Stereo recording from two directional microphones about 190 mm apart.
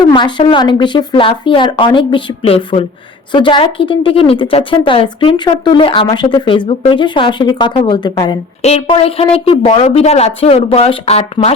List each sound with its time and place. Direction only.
0.1 s speech: 25° left (ahead or behind)
8.6 s speech: 30° left (ahead or behind)